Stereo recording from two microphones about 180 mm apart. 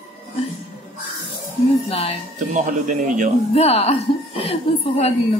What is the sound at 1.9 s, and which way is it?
Speech, 35° left (ahead or behind).